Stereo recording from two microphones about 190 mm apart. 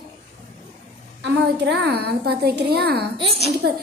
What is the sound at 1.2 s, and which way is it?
A woman's voice, 70° right (ahead or behind).